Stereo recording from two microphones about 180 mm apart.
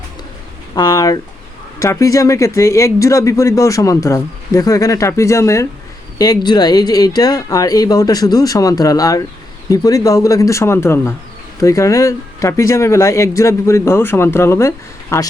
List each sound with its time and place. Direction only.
0.8 s speech: 25° left (ahead or behind)